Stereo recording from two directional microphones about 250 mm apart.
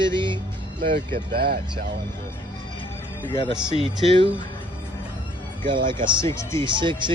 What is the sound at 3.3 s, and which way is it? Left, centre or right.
Speech, left.